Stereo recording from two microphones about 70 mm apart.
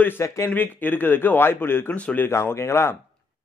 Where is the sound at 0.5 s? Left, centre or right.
Left.